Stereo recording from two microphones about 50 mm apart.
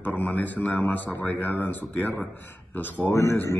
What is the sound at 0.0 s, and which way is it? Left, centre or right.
A man's voice, left.